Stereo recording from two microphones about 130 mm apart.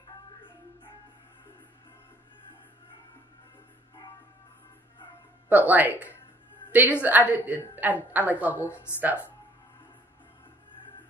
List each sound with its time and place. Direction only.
5.5 s a woman's voice: 15° right (ahead or behind)
8.6 s a woman's voice: 20° left (ahead or behind)